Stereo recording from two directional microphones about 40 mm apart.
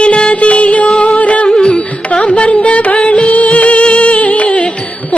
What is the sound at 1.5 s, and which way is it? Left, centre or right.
Carnatic music, left.